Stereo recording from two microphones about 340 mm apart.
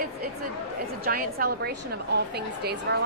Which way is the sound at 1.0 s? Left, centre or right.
Right.